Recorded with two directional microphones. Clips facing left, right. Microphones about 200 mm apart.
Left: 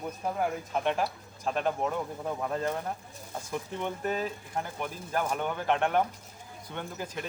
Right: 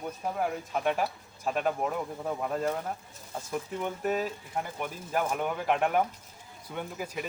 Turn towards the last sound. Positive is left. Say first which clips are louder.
# right 1 dB
turn(degrees=-5)  # may be behind; listen again after turning